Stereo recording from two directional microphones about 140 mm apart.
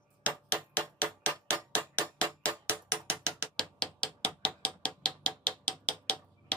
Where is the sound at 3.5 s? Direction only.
5° left (ahead or behind).